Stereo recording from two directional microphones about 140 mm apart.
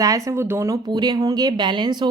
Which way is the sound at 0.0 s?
25° right (ahead or behind).